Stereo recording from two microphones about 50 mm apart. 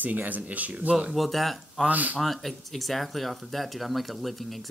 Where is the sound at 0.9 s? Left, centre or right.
Centre.